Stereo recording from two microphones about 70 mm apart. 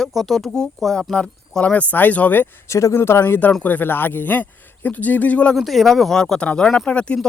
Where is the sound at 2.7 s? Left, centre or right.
Left; by 5.6 s centre.